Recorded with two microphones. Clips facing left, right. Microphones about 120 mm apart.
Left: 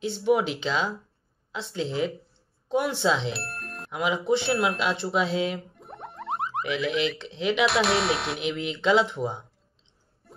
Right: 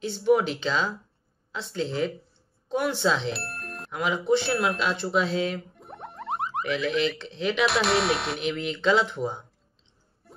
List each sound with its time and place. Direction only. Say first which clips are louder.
0.2 s speech: right 2 dB; 15° left (ahead or behind)
3.3 s music: even; centre (ahead or behind)
3.9 s speech: right 1 dB; 15° left (ahead or behind)
4.4 s speech: left 1 dB; centre (ahead or behind)
4.7 s speech: even; 15° left (ahead or behind)
5.8 s music: even; centre (ahead or behind)
6.7 s speech: right 1 dB; 10° left (ahead or behind)
7.6 s speech: even; centre (ahead or behind)
8.4 s speech: even; 15° left (ahead or behind)